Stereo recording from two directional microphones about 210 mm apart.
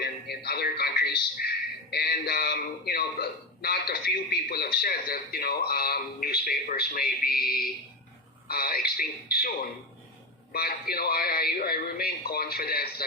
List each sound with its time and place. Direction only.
0.0 s a man's voice: 50° left (ahead or behind)